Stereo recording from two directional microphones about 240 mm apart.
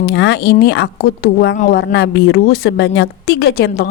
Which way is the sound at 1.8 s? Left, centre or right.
Left.